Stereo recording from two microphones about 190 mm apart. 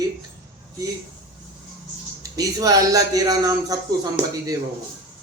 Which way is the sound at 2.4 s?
20° right (ahead or behind).